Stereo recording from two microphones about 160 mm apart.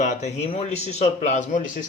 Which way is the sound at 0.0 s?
45° left (ahead or behind).